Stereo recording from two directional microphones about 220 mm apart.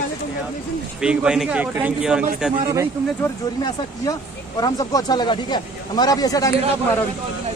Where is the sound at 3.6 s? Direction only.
15° left (ahead or behind).